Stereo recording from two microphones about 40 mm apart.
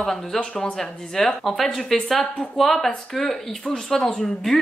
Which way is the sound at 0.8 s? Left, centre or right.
Centre.